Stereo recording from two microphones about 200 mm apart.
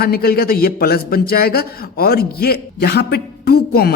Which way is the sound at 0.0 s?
50° left (ahead or behind).